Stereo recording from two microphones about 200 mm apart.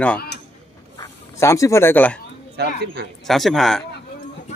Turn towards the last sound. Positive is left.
turn(degrees=0)  # may be behind; listen again after turning